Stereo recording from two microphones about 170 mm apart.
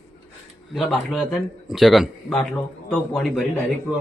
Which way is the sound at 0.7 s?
Centre (ahead or behind).